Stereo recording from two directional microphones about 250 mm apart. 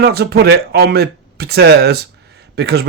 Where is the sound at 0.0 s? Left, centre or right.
Right.